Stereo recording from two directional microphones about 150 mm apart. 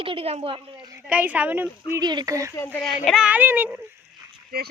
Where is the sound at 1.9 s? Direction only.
25° right (ahead or behind).